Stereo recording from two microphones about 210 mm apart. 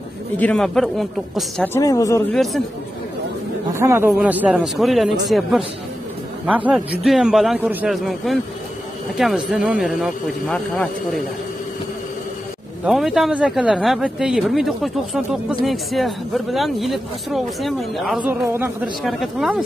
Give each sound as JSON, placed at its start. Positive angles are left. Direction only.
{"t": 0.4, "sound": "speech", "side_deg": 5}
{"t": 1.7, "sound": "a man's voice", "side_deg": 15}
{"t": 2.3, "sound": "speech", "side_deg": 0}
{"t": 3.7, "sound": "a woman's voice", "side_deg": -15}
{"t": 12.8, "sound": "speech", "side_deg": 0}
{"t": 18.4, "sound": "a woman's voice", "side_deg": -10}
{"t": 19.0, "sound": "speech", "side_deg": 0}